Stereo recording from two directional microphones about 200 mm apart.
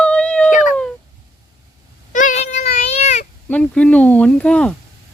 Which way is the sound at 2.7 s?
35° left (ahead or behind).